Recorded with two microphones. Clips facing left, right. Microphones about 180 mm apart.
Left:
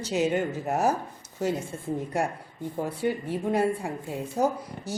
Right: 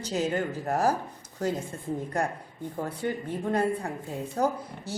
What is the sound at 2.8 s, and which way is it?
Speech, 10° left (ahead or behind).